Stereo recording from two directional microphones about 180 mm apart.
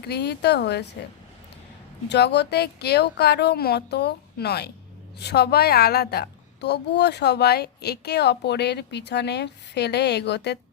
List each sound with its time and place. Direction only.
0.1 s a woman's voice: 65° left (ahead or behind)
2.0 s a woman's voice: 70° left (ahead or behind)